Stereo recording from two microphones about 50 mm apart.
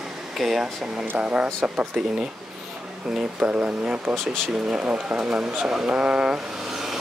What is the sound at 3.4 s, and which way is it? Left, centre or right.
Speech, right.